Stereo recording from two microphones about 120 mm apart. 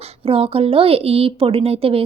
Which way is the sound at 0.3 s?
55° right (ahead or behind).